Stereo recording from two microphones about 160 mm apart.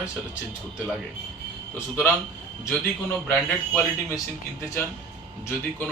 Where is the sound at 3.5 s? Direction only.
10° left (ahead or behind).